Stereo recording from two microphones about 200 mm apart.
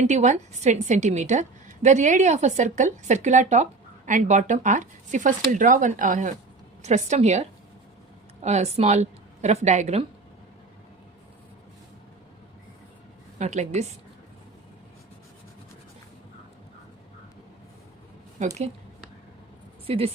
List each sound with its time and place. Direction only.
0.0 s a woman's voice: 35° right (ahead or behind)
13.4 s a woman's voice: 35° right (ahead or behind)
18.3 s a woman's voice: 35° right (ahead or behind)